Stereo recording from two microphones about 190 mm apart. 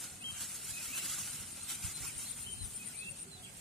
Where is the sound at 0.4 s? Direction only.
Centre (ahead or behind).